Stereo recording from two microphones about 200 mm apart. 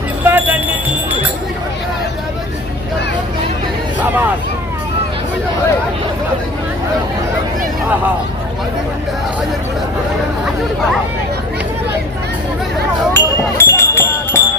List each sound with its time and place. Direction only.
0.3 s music: 10° right (ahead or behind)
13.1 s music: 10° left (ahead or behind)